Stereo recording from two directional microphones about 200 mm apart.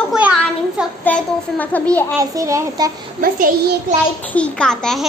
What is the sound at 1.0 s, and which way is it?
A child's voice, 10° left (ahead or behind).